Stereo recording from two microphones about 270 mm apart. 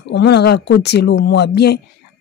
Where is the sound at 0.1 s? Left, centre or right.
Left.